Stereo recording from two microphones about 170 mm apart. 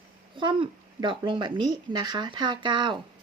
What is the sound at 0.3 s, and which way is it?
A woman's voice, 30° right (ahead or behind).